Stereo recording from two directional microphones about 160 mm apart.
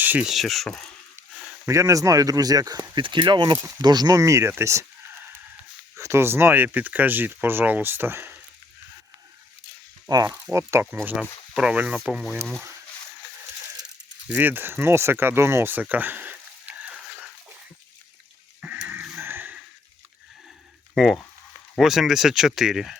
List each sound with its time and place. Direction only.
0.0 s speech: 10° right (ahead or behind)
1.5 s speech: 15° right (ahead or behind)
6.0 s speech: 15° right (ahead or behind)
10.2 s speech: 15° right (ahead or behind); by 12.6 s centre (ahead or behind)
14.3 s speech: 10° right (ahead or behind)
18.6 s a sound: 10° right (ahead or behind)
20.9 s speech: centre (ahead or behind)